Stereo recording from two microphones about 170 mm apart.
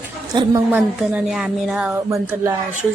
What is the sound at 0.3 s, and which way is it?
Speech, 25° right (ahead or behind).